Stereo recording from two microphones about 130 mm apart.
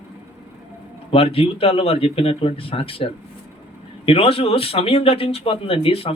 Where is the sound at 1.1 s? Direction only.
45° left (ahead or behind).